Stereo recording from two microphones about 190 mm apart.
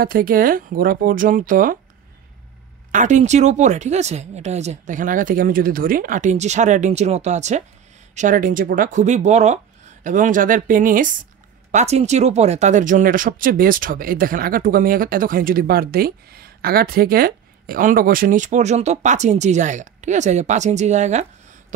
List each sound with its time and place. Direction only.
0.0 s speech: 50° right (ahead or behind)
2.9 s speech: 40° right (ahead or behind)